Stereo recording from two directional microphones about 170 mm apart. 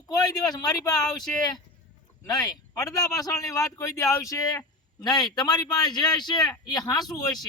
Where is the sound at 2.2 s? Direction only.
20° left (ahead or behind).